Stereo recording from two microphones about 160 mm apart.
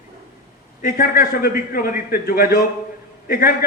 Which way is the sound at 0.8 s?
60° left (ahead or behind).